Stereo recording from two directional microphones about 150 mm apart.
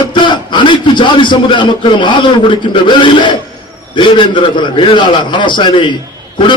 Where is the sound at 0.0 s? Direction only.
30° left (ahead or behind).